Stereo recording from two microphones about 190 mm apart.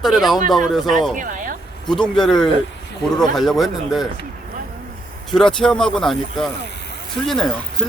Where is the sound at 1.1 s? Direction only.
45° right (ahead or behind).